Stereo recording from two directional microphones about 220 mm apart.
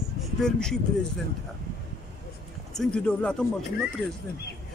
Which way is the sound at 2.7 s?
5° left (ahead or behind).